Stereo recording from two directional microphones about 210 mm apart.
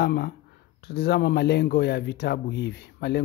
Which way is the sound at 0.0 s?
50° left (ahead or behind).